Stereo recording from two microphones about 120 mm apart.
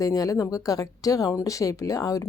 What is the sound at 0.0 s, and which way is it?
Speech, 30° left (ahead or behind).